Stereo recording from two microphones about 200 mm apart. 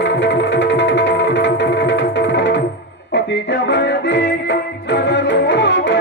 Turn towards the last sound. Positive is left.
turn(degrees=60)  # may be behind; listen again after turning